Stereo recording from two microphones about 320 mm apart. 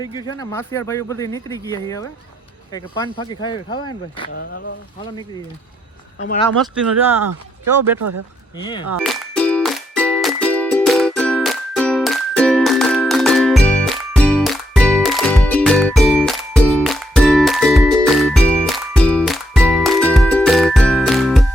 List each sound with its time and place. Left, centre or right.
0.0 s speech: centre
4.4 s speech: left
7.6 s speech: right
8.5 s speech: centre
9.0 s music: centre